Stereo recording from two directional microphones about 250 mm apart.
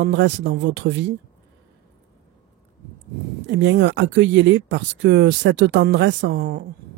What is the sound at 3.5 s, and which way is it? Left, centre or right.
Speech, right.